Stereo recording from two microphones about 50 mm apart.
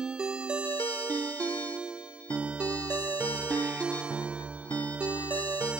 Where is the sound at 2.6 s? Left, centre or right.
Left.